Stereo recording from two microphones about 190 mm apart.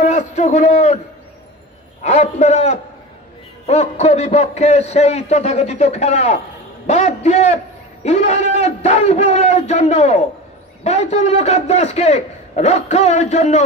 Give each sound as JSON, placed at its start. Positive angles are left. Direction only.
{"t": 0.0, "sound": "a man's voice", "side_deg": 35}
{"t": 2.0, "sound": "a man's voice", "side_deg": 35}